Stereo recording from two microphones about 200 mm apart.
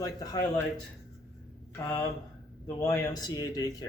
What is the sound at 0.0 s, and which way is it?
Speech, 20° left (ahead or behind).